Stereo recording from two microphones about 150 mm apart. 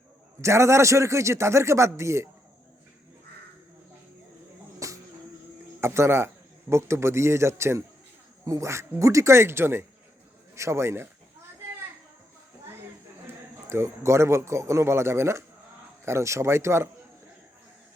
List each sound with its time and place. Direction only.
0.4 s a man's voice: 20° right (ahead or behind)
4.8 s a sound: 20° right (ahead or behind)
5.8 s a man's voice: 15° right (ahead or behind)
13.7 s a man's voice: 20° right (ahead or behind)